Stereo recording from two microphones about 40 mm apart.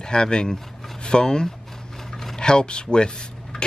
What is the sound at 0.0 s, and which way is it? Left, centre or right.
Speech, left.